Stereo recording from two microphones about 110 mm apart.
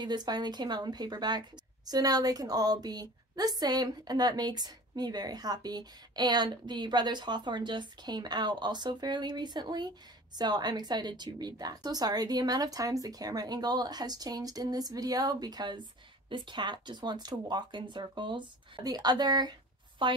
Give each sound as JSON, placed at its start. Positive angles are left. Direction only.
{"t": 0.0, "sound": "a woman's voice", "side_deg": -40}